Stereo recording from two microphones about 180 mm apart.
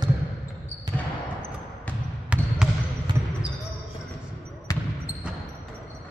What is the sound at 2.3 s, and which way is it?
Trickle, 5° right (ahead or behind).